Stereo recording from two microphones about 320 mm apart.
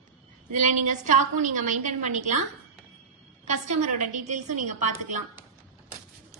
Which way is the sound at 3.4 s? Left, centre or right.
Right.